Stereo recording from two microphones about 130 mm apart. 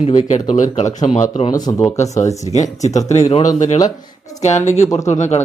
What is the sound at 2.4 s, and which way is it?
Speech, 60° left (ahead or behind).